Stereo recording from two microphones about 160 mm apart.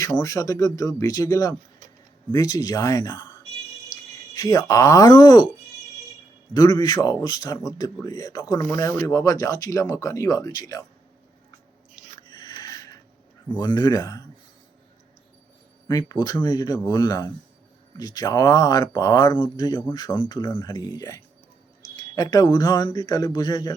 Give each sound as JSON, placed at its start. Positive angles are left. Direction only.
{"t": 0.1, "sound": "speech", "side_deg": 20}
{"t": 4.4, "sound": "speech", "side_deg": 25}
{"t": 6.5, "sound": "speech", "side_deg": 25}
{"t": 12.3, "sound": "a sound", "side_deg": 25}
{"t": 13.6, "sound": "speech", "side_deg": 25}
{"t": 15.9, "sound": "speech", "side_deg": 25}